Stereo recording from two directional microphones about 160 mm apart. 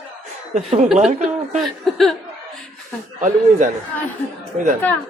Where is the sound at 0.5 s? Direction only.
45° right (ahead or behind).